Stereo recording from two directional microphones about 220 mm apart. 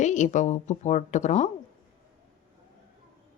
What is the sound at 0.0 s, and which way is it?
A woman's voice, 35° left (ahead or behind).